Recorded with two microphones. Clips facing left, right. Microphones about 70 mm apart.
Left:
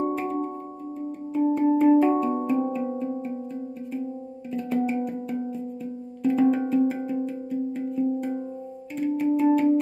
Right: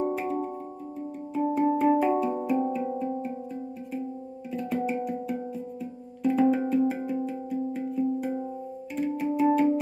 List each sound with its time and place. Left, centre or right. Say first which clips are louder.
0.0 s music: left 2 dB; centre
4.5 s music: left 3 dB; centre